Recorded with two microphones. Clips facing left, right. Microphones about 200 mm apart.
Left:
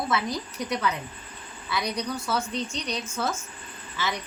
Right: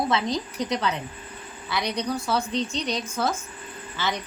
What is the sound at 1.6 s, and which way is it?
Speech, 35° right (ahead or behind).